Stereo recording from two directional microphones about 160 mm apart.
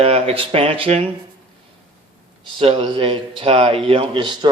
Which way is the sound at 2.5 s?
35° right (ahead or behind).